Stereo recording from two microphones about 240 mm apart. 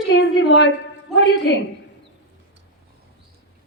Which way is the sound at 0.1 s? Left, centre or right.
Left.